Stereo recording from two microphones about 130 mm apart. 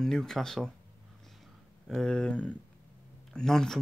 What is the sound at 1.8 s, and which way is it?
Speech, 5° left (ahead or behind).